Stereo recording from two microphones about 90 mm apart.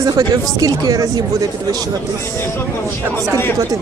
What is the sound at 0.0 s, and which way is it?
Speech, 40° right (ahead or behind).